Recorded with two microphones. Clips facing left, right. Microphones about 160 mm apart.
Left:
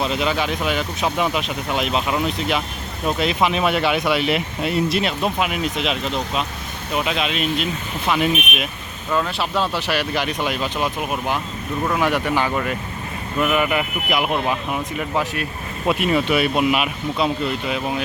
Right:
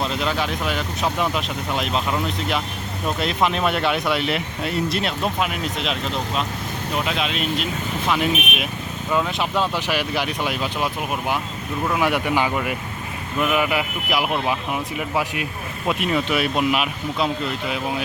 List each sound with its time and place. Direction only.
0.2 s speech: centre (ahead or behind)
9.1 s speech: 10° right (ahead or behind)
15.9 s speech: centre (ahead or behind)